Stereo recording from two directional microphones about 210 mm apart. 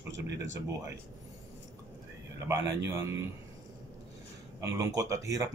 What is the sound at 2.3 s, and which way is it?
Speech, 15° right (ahead or behind).